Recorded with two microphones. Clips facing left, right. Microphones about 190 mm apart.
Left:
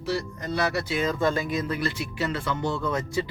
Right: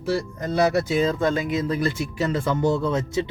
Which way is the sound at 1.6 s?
40° right (ahead or behind).